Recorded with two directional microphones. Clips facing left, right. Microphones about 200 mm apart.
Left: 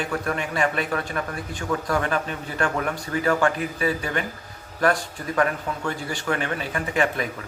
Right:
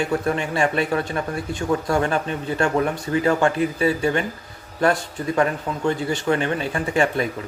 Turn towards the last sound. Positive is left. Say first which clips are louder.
# right 3 dB
turn(degrees=-30)  # may be behind; listen again after turning